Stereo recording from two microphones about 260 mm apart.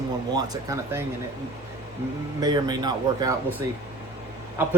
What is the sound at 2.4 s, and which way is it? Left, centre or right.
Speech, centre.